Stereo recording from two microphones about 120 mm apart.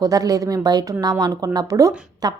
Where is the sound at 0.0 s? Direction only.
30° right (ahead or behind).